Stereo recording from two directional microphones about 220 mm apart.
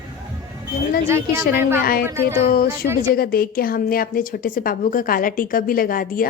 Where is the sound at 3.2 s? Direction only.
40° left (ahead or behind).